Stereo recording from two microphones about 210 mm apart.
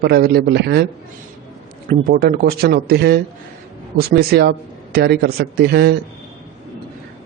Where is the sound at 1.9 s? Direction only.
45° right (ahead or behind).